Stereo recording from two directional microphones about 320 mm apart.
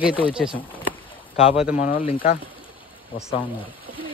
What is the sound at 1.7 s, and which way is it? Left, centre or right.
Speech, left.